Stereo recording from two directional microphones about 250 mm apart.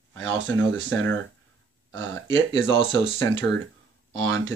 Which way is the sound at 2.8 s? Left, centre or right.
Right.